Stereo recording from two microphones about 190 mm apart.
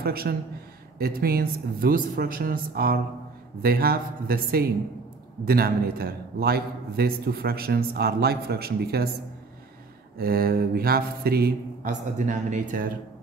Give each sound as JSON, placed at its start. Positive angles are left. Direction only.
{"t": 0.0, "sound": "a man's voice", "side_deg": -55}
{"t": 10.1, "sound": "a man's voice", "side_deg": -50}